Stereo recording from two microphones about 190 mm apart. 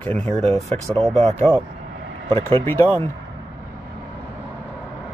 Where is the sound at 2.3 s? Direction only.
30° right (ahead or behind).